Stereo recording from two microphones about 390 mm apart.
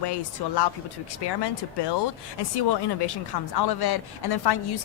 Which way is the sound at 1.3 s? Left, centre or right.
Left.